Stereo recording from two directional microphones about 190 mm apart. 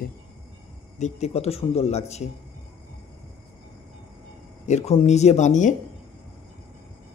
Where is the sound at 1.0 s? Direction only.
35° left (ahead or behind).